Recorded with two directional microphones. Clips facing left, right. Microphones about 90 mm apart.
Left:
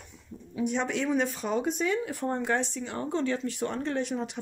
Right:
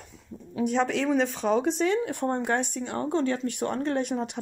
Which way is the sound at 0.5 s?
80° right.